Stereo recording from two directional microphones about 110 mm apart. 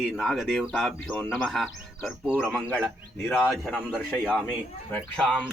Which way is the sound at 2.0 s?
10° right (ahead or behind).